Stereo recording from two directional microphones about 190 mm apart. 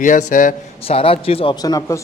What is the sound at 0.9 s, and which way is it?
Speech, 30° left (ahead or behind).